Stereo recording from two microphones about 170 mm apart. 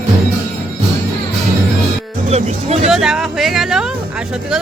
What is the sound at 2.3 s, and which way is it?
Speech, 40° right (ahead or behind).